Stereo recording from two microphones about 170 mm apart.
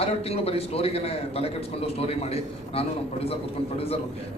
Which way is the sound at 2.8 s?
35° left (ahead or behind).